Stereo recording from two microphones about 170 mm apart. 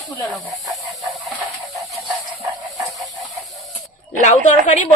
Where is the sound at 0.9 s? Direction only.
Centre (ahead or behind).